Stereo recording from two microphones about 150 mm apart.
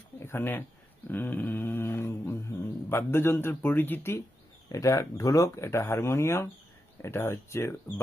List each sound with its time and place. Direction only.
0.2 s dog: 15° left (ahead or behind)
4.7 s speech: 20° left (ahead or behind)
7.0 s dog: 15° left (ahead or behind)